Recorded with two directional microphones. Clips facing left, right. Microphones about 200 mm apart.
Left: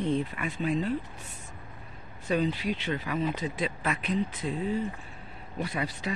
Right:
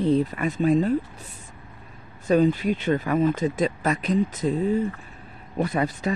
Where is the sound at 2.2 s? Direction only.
45° right (ahead or behind).